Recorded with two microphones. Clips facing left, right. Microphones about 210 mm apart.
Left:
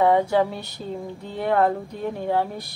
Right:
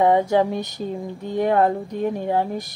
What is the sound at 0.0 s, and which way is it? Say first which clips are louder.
A woman's voice: right 2 dB; 20° right (ahead or behind).